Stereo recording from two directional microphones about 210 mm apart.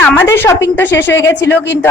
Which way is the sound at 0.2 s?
15° left (ahead or behind).